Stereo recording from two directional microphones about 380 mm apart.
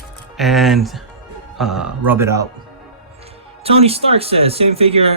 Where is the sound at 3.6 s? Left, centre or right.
Centre.